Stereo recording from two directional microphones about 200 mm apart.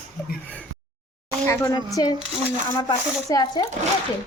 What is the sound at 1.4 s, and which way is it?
Speech, 15° left (ahead or behind).